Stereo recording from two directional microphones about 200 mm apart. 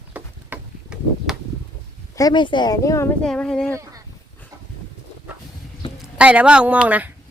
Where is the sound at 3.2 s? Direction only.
5° left (ahead or behind).